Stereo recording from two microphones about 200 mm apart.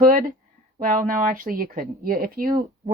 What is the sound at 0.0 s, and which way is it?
Speech, 45° right (ahead or behind).